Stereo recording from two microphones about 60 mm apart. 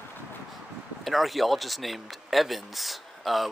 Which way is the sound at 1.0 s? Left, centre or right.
Centre.